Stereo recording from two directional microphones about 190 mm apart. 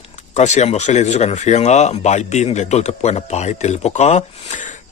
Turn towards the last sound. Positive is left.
turn(degrees=40)  # may be behind; listen again after turning